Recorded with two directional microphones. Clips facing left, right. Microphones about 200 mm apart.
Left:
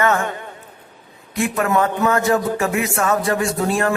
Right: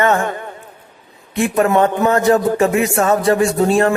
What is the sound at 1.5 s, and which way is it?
Speech, 30° right (ahead or behind).